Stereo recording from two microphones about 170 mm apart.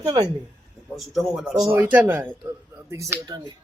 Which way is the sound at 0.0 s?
30° right (ahead or behind).